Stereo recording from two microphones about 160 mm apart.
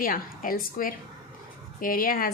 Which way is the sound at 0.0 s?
60° left (ahead or behind).